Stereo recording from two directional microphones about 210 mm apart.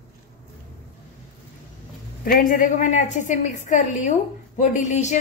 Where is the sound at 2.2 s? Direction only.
40° left (ahead or behind).